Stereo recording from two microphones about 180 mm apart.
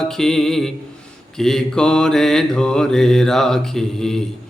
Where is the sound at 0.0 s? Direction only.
5° left (ahead or behind).